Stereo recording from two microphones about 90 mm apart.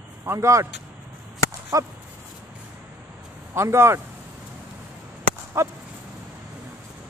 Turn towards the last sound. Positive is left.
turn(degrees=-30)  # may be behind; listen again after turning